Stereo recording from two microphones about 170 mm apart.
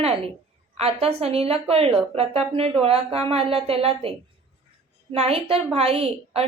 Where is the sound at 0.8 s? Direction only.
35° right (ahead or behind).